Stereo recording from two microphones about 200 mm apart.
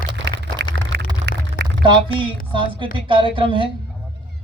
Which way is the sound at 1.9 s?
25° right (ahead or behind).